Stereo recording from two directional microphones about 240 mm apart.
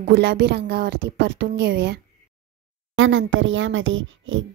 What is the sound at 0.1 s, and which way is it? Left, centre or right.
Speech, right.